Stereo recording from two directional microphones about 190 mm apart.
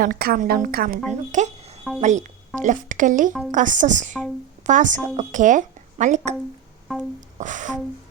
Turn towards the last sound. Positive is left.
turn(degrees=-40)  # may be behind; listen again after turning